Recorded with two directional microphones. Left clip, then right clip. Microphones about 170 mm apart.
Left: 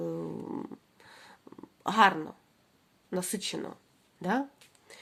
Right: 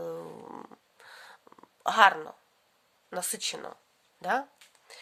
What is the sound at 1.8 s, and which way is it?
Speech, 30° right (ahead or behind).